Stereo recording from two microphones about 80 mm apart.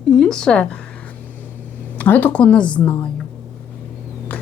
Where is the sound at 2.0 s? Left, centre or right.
Left.